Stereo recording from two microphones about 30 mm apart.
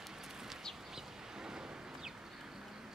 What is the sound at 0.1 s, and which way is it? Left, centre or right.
Bird, centre.